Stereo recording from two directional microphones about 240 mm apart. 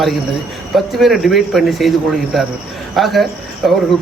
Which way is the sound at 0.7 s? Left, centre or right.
Centre.